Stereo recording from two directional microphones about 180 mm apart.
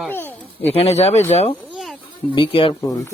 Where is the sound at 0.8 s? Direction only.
35° left (ahead or behind).